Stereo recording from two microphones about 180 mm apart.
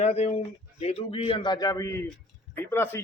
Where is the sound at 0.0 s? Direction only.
35° left (ahead or behind).